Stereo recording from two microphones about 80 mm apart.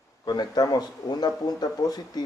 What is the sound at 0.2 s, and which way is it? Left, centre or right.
Speech, left.